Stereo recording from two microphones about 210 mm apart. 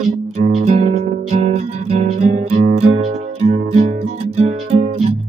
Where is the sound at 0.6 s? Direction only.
35° right (ahead or behind).